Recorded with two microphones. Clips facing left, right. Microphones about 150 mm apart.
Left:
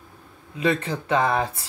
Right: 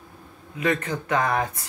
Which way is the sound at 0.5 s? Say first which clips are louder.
Left 1 dB; 30° left (ahead or behind).